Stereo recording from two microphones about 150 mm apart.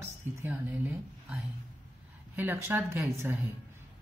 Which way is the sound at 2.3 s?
15° right (ahead or behind).